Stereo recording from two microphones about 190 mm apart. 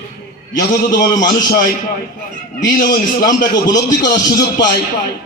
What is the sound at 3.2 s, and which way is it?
Speech, 20° left (ahead or behind).